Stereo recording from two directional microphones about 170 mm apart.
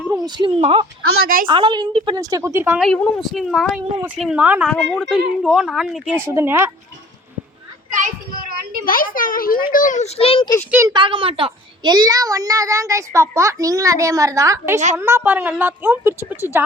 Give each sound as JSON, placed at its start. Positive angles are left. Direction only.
{"t": 0.3, "sound": "a woman's voice", "side_deg": -30}
{"t": 1.2, "sound": "a woman's voice", "side_deg": -60}
{"t": 1.5, "sound": "a woman's voice", "side_deg": -30}
{"t": 2.7, "sound": "a woman's voice", "side_deg": 0}
{"t": 6.1, "sound": "a woman's voice", "side_deg": -15}
{"t": 7.9, "sound": "children playing", "side_deg": -50}
{"t": 8.8, "sound": "a child's voice", "side_deg": 55}
{"t": 10.2, "sound": "a child's voice", "side_deg": 35}
{"t": 10.7, "sound": "a woman's voice", "side_deg": -15}
{"t": 10.9, "sound": "a woman's voice", "side_deg": -30}